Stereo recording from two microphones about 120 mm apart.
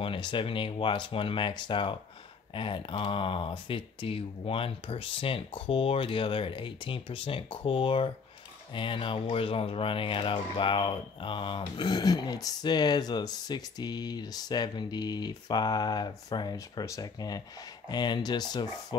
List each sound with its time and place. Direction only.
0.0 s speech: 45° left (ahead or behind)